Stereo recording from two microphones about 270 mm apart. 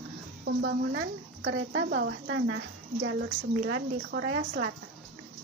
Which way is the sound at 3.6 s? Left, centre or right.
Right.